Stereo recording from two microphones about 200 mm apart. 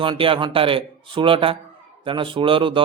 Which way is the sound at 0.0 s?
25° right (ahead or behind).